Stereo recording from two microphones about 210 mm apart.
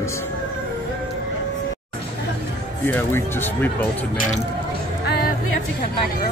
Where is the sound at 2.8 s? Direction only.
10° left (ahead or behind).